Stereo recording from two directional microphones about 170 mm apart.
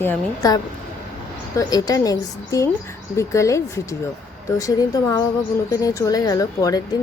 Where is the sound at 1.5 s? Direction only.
20° left (ahead or behind).